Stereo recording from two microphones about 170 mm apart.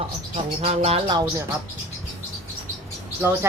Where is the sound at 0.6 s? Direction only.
40° right (ahead or behind).